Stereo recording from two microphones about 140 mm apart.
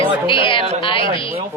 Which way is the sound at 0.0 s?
35° left (ahead or behind).